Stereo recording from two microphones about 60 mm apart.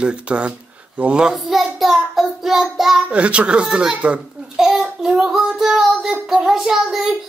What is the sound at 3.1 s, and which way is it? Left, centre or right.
Speech, right.